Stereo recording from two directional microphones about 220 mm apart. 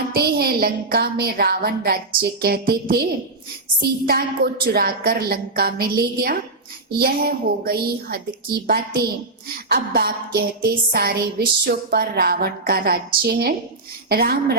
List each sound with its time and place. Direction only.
0.1 s a woman's voice: 45° right (ahead or behind)